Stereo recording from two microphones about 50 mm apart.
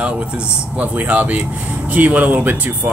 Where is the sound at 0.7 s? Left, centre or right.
Right.